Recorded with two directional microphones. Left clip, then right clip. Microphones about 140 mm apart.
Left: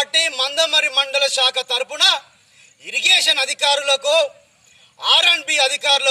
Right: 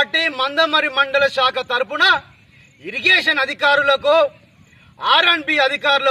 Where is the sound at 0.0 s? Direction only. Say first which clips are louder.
Right 1 dB; 20° left (ahead or behind).